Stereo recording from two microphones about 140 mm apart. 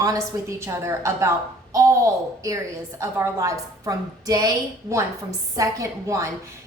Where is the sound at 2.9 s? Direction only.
20° right (ahead or behind).